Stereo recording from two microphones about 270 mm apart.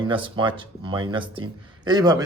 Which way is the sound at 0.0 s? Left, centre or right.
Centre.